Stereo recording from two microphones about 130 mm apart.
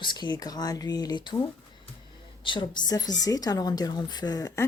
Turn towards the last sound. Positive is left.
turn(degrees=25)  # may be behind; listen again after turning